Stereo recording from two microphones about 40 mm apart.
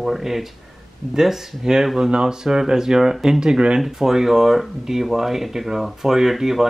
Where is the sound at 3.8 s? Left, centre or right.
Centre.